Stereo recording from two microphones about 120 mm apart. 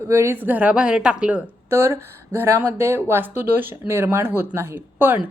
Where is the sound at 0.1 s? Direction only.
20° right (ahead or behind).